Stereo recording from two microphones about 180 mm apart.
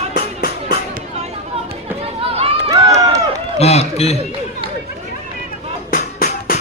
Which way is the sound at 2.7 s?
20° right (ahead or behind).